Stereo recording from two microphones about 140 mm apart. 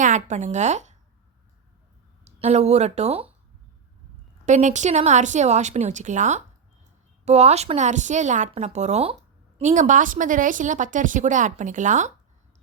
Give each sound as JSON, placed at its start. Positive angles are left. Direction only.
{"t": 0.0, "sound": "speech", "side_deg": -60}
{"t": 2.2, "sound": "speech", "side_deg": -50}
{"t": 4.4, "sound": "a woman's voice", "side_deg": -60}
{"t": 9.6, "sound": "speech", "side_deg": -60}